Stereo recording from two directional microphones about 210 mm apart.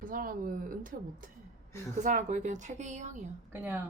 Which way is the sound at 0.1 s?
45° right (ahead or behind).